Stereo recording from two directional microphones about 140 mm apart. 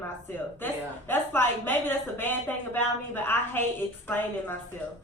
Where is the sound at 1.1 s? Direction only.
15° left (ahead or behind).